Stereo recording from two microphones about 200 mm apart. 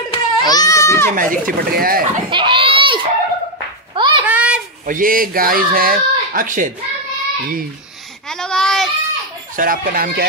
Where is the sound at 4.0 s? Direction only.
25° right (ahead or behind).